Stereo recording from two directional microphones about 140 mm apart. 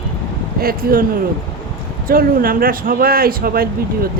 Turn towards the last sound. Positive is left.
turn(degrees=-90)